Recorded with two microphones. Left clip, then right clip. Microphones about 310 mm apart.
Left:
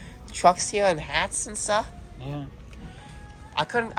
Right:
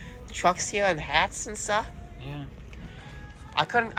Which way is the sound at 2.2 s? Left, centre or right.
Left.